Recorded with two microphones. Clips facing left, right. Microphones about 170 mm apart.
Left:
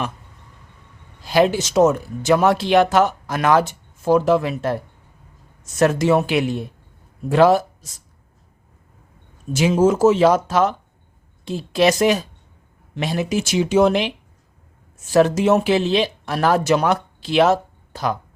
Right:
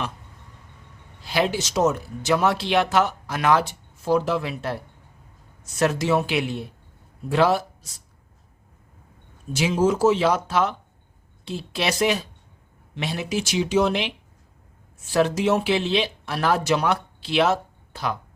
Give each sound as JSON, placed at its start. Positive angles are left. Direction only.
{"t": 1.2, "sound": "speech", "side_deg": 45}
{"t": 9.6, "sound": "speech", "side_deg": 45}
{"t": 15.1, "sound": "speech", "side_deg": 45}